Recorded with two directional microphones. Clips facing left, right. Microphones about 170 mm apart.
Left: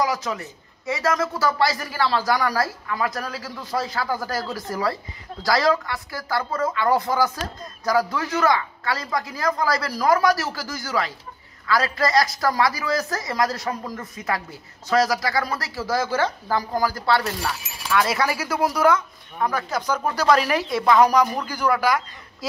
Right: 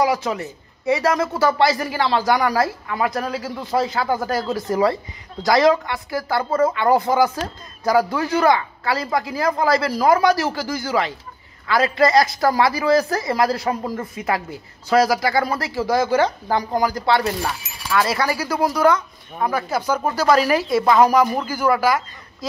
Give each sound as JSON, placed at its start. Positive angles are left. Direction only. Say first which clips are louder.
{"t": 0.0, "sound": "a man's voice", "louder": "right 4 dB", "side_deg": -25}
{"t": 17.9, "sound": "speech", "louder": "right 2 dB", "side_deg": 0}
{"t": 19.4, "sound": "speech", "louder": "right 3 dB", "side_deg": -10}
{"t": 22.4, "sound": "speech", "louder": "right 2 dB", "side_deg": 5}